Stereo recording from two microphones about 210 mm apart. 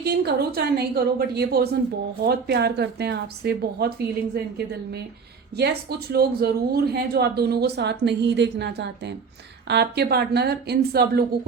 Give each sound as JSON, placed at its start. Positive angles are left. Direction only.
{"t": 0.0, "sound": "speech", "side_deg": -50}